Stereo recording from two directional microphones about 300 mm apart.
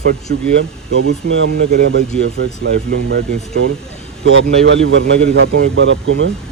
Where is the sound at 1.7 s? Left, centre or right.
Right.